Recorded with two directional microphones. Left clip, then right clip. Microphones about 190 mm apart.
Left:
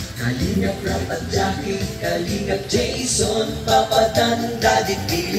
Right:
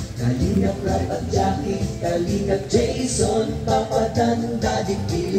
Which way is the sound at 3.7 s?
65° left (ahead or behind).